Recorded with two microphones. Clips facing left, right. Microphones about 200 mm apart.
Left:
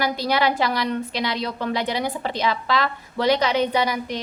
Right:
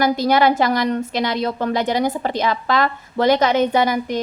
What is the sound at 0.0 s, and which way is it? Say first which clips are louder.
A woman's voice: right 6 dB; 45° right (ahead or behind).